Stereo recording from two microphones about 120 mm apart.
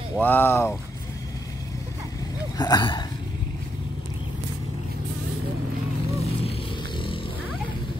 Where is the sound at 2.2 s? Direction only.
35° left (ahead or behind).